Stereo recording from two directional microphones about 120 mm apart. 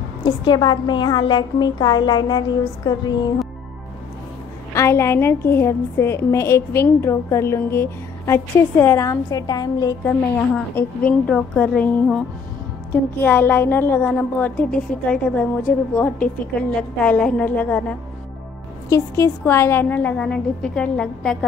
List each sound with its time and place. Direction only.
0.2 s a woman's voice: 40° left (ahead or behind)
4.7 s a woman's voice: 25° left (ahead or behind)
10.0 s a woman's voice: 20° left (ahead or behind)
13.2 s a woman's voice: 15° left (ahead or behind)
18.9 s a woman's voice: 25° left (ahead or behind); by 21.5 s 5° left (ahead or behind)